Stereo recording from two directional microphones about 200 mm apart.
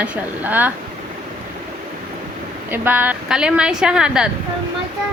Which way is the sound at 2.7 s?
10° right (ahead or behind).